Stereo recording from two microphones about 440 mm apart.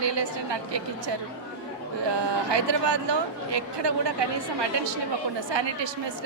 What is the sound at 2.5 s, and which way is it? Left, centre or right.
Speech, right.